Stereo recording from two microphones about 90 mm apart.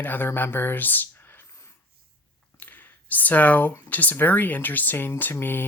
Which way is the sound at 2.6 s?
20° left (ahead or behind).